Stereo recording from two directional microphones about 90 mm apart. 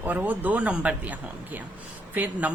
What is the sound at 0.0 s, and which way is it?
Speech, 20° right (ahead or behind).